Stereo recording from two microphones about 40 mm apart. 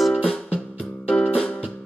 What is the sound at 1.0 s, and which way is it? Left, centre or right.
Music, left.